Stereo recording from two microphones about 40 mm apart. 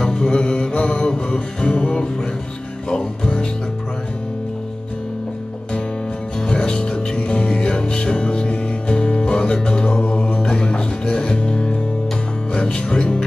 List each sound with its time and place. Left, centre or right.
0.0 s music: left
6.4 s music: centre